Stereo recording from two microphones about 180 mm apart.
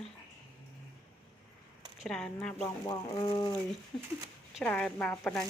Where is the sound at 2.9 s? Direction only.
25° left (ahead or behind).